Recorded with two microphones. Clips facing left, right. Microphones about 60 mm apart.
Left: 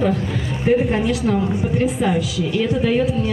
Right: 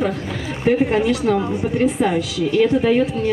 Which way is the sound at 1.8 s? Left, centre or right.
Right.